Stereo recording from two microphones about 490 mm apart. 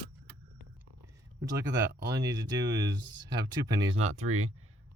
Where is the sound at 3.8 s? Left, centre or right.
Centre.